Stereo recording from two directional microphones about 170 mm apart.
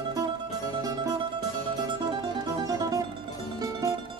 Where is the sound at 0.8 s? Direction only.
25° right (ahead or behind).